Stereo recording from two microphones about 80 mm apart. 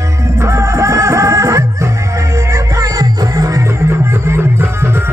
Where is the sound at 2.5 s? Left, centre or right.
Right.